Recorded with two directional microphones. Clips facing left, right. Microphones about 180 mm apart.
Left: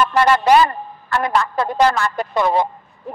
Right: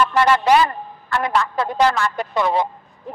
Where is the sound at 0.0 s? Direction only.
45° left (ahead or behind).